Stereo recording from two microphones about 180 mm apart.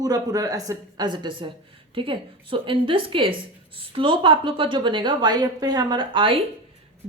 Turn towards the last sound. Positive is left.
turn(degrees=-30)  # may be behind; listen again after turning